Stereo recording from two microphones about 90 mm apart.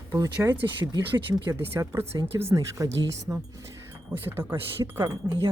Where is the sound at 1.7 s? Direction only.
30° right (ahead or behind).